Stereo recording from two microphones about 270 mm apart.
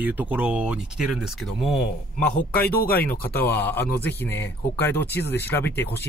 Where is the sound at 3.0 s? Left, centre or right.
Centre.